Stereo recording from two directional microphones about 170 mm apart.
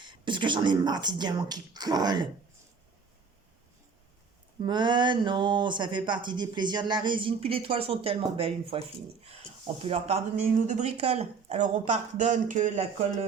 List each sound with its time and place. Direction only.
0.0 s speech: 25° right (ahead or behind)
4.6 s speech: 25° right (ahead or behind); by 13.1 s 45° right (ahead or behind)